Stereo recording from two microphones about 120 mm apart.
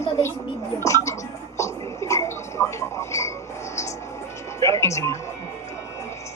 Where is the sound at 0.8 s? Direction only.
25° left (ahead or behind).